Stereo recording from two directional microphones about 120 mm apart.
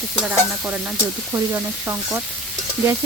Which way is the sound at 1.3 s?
20° right (ahead or behind).